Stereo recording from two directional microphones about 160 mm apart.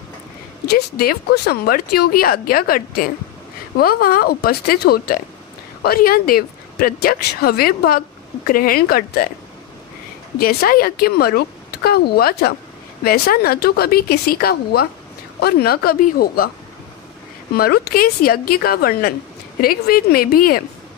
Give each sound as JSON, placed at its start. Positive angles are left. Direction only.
{"t": 0.7, "sound": "a woman's voice", "side_deg": 80}
{"t": 10.4, "sound": "a woman's voice", "side_deg": 70}
{"t": 17.6, "sound": "a woman's voice", "side_deg": 70}